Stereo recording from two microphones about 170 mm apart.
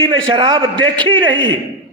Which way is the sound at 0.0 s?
25° right (ahead or behind).